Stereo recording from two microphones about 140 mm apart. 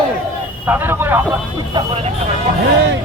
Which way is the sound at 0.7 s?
15° right (ahead or behind).